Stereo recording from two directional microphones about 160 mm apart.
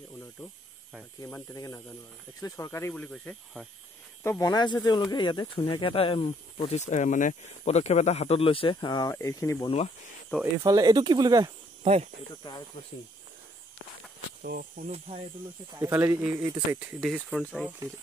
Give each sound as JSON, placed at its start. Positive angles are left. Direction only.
{"t": 1.2, "sound": "speech", "side_deg": 20}
{"t": 2.9, "sound": "speech", "side_deg": 5}
{"t": 4.2, "sound": "speech", "side_deg": 20}
{"t": 10.6, "sound": "speech", "side_deg": -25}
{"t": 11.8, "sound": "speech", "side_deg": -40}
{"t": 12.4, "sound": "speech", "side_deg": 35}
{"t": 14.4, "sound": "speech", "side_deg": -65}
{"t": 14.9, "sound": "speech", "side_deg": -35}
{"t": 15.7, "sound": "speech", "side_deg": -15}
{"t": 16.3, "sound": "speech", "side_deg": -25}
{"t": 17.0, "sound": "speech", "side_deg": 0}
{"t": 17.6, "sound": "speech", "side_deg": -15}